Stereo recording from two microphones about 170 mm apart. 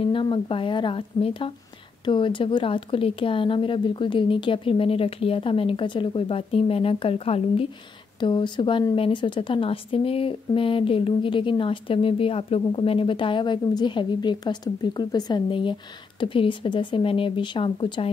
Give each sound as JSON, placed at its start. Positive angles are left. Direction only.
{"t": 0.0, "sound": "a woman's voice", "side_deg": 30}